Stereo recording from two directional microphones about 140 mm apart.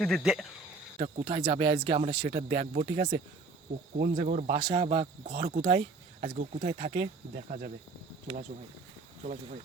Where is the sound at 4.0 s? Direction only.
65° right (ahead or behind).